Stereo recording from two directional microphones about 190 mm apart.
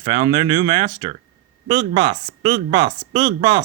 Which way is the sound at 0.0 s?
25° right (ahead or behind).